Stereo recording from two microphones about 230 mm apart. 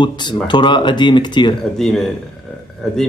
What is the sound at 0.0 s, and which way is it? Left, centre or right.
Speech, centre.